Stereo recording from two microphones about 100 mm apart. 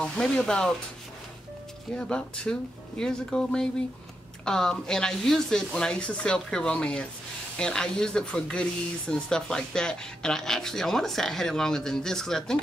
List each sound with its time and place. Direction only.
0.0 s speech: 10° left (ahead or behind)
2.0 s speech: 10° left (ahead or behind)